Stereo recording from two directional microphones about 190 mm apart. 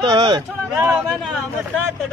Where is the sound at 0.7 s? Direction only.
5° right (ahead or behind).